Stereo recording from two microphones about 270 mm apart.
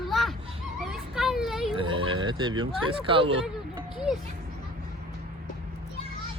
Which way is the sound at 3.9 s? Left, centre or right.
Centre.